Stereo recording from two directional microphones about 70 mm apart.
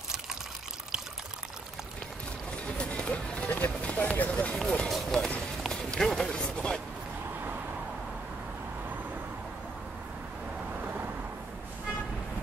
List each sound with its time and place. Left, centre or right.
2.5 s run: centre
5.6 s music: centre